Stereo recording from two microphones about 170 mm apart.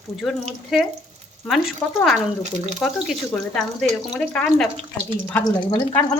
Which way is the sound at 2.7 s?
Centre (ahead or behind).